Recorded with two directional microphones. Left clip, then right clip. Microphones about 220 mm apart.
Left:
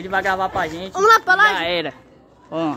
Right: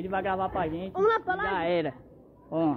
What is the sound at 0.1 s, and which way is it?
Speech, 15° left (ahead or behind).